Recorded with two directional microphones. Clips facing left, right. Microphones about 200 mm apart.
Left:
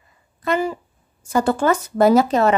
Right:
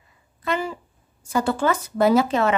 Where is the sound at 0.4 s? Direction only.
45° left (ahead or behind).